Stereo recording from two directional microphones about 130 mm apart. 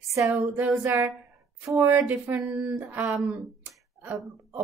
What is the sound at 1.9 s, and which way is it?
Speech, 10° right (ahead or behind).